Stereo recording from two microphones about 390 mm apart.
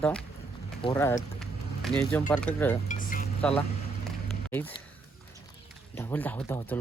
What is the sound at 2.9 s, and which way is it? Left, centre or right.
Chink, left.